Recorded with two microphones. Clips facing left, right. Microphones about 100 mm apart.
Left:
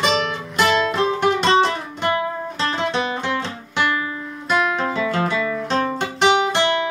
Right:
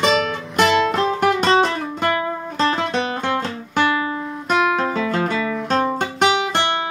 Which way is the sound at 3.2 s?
45° right (ahead or behind).